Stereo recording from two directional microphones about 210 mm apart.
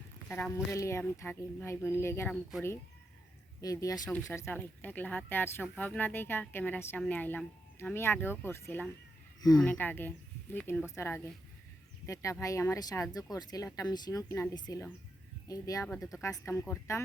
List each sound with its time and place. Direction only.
0.3 s speech: 5° left (ahead or behind)
0.5 s a woman's voice: 15° left (ahead or behind)
2.3 s speech: centre (ahead or behind)
3.6 s a woman's voice: 15° left (ahead or behind)